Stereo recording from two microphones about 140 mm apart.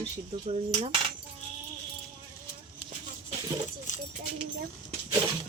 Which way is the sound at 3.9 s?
65° left (ahead or behind).